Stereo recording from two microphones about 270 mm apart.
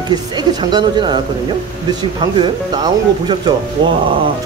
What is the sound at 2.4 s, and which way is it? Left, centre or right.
Speech, centre.